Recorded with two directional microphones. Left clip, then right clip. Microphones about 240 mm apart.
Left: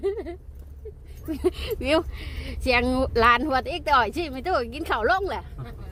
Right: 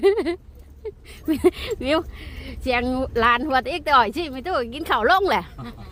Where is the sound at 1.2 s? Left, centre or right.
Centre.